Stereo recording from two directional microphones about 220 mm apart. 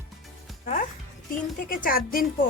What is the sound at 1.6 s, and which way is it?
Speech, 40° left (ahead or behind).